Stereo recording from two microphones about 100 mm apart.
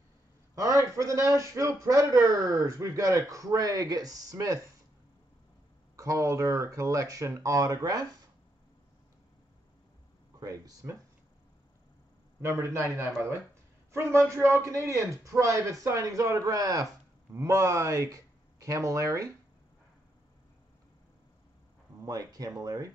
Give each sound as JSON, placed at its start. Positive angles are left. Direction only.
{"t": 0.6, "sound": "a man's voice", "side_deg": -30}
{"t": 5.9, "sound": "a man's voice", "side_deg": -35}
{"t": 10.4, "sound": "a man's voice", "side_deg": -35}
{"t": 12.4, "sound": "a man's voice", "side_deg": -30}
{"t": 22.0, "sound": "a man's voice", "side_deg": -35}